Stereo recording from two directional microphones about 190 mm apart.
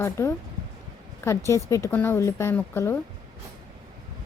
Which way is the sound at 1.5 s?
15° left (ahead or behind).